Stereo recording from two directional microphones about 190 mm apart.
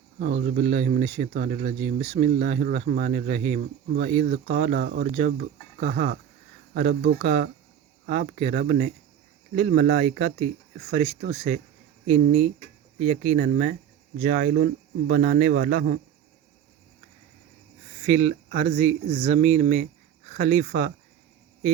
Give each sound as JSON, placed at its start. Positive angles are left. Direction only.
{"t": 0.2, "sound": "speech", "side_deg": -50}
{"t": 14.5, "sound": "speech", "side_deg": -60}
{"t": 18.0, "sound": "speech", "side_deg": -35}